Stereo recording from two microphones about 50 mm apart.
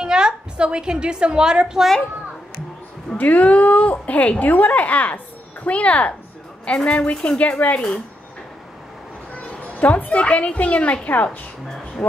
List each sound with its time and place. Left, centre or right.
0.0 s a woman's voice: centre
3.2 s a woman's voice: left
9.3 s a woman's voice: left
12.0 s speech: centre